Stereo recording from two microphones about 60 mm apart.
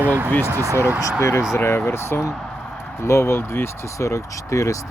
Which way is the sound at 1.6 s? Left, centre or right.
Left.